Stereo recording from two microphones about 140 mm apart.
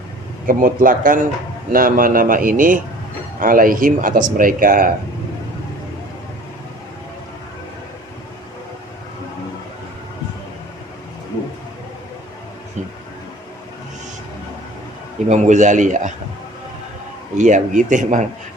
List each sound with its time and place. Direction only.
0.4 s speech: 85° right
1.7 s speech: 90° right
15.3 s a man's voice: 60° right (ahead or behind)
17.3 s a man's voice: 60° right (ahead or behind)